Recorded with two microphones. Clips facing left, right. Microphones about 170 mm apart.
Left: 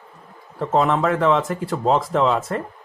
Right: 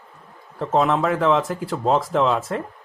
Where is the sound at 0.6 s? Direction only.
Centre (ahead or behind).